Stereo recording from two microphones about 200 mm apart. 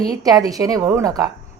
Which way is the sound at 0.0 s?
20° right (ahead or behind).